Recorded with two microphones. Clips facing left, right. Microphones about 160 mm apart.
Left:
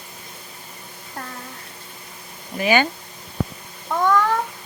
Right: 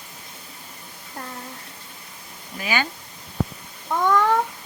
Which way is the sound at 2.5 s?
60° left (ahead or behind).